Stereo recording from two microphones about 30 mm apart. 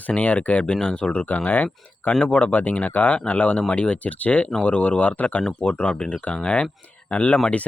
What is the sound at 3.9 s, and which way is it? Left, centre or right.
Speech, left.